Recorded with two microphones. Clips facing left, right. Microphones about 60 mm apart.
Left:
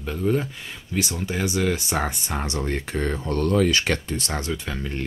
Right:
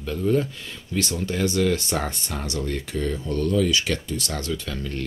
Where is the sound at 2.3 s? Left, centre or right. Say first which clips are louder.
Left 1 dB; left.